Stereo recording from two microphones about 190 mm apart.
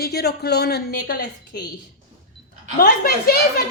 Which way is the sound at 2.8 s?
55° left (ahead or behind).